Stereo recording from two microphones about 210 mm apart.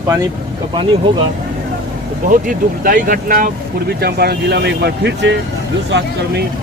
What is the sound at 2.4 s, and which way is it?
Speech, 40° right (ahead or behind).